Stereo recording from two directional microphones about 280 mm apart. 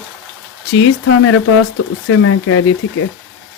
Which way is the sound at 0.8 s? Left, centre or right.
Left.